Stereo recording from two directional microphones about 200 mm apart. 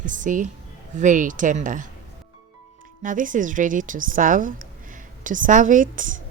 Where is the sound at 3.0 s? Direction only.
40° right (ahead or behind).